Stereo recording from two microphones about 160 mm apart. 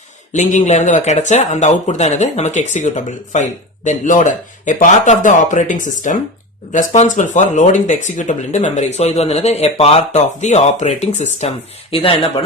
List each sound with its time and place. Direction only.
0.3 s speech: 50° left (ahead or behind)